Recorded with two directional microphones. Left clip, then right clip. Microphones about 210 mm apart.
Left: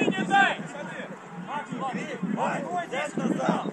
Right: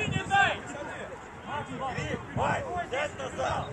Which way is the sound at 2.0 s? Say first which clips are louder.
Even; 25° right (ahead or behind).